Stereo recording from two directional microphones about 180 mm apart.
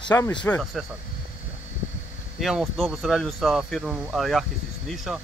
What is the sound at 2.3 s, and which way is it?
Speech, centre (ahead or behind).